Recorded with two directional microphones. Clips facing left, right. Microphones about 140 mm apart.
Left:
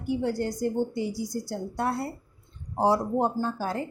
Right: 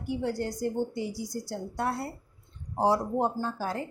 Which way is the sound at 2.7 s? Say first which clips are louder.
Left 2 dB; 35° left (ahead or behind).